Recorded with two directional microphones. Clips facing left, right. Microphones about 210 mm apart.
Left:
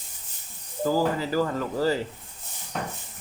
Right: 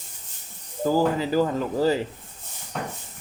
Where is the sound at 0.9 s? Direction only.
20° right (ahead or behind).